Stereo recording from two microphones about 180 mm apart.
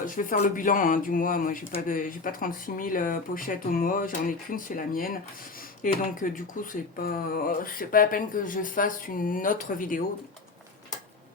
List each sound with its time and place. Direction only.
0.0 s speech: 50° left (ahead or behind)